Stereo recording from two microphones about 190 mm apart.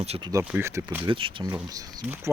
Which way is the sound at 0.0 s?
35° right (ahead or behind).